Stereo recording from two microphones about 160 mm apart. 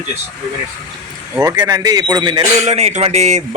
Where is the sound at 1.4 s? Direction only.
25° right (ahead or behind).